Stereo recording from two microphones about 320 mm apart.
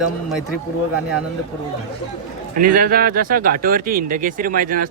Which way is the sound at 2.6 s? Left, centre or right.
Right.